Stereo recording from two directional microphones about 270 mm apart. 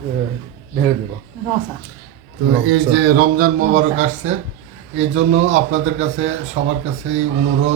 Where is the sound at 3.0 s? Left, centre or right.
Right.